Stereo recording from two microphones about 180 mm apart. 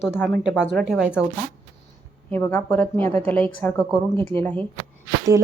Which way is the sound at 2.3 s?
10° left (ahead or behind).